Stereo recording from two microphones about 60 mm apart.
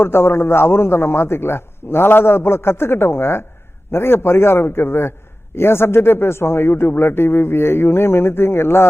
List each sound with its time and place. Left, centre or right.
0.0 s a man's voice: left